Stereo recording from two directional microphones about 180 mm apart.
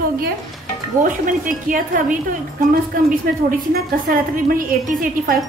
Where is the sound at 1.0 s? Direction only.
45° right (ahead or behind).